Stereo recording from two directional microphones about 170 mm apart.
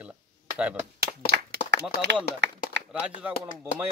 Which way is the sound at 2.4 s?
90° right.